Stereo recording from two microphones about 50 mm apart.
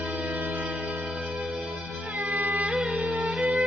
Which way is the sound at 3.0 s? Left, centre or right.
Right.